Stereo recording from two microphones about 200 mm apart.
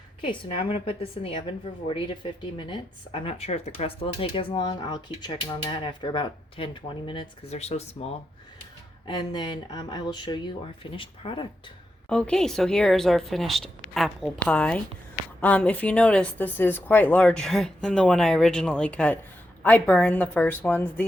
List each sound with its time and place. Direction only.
0.2 s speech: 25° left (ahead or behind)
12.0 s a woman's voice: 5° left (ahead or behind)